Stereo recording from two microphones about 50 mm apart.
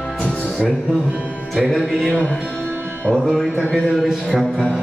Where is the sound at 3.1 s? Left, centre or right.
Centre.